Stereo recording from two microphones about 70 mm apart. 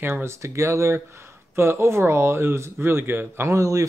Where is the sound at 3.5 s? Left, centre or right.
Right.